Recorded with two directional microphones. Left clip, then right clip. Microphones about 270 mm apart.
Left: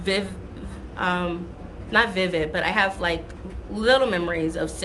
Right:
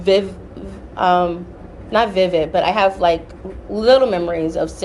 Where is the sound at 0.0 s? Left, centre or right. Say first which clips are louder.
Right 10 dB; centre.